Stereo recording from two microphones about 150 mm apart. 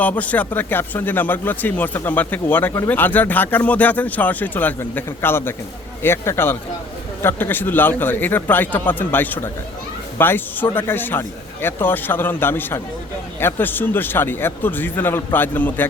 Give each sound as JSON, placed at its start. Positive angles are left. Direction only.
{"t": 0.0, "sound": "speech", "side_deg": 10}